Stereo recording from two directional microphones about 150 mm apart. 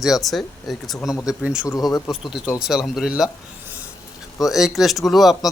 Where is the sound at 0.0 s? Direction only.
Centre (ahead or behind).